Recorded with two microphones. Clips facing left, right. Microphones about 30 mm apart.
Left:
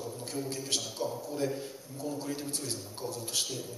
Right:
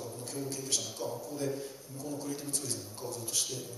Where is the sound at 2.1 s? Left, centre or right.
Left.